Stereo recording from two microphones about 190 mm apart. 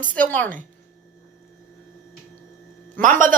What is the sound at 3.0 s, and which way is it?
Speech, 45° right (ahead or behind).